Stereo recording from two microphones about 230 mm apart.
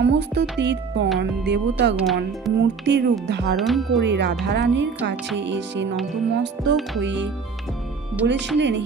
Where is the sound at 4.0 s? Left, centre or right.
Right.